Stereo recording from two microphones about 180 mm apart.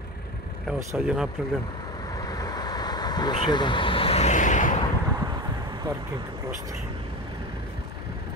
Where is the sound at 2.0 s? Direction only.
20° left (ahead or behind); by 4.7 s 45° left (ahead or behind).